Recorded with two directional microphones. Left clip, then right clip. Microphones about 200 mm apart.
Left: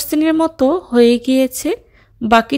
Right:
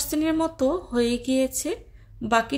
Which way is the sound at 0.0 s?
40° left (ahead or behind).